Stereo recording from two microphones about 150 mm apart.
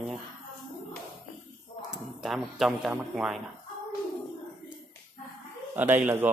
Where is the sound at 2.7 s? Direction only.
5° right (ahead or behind).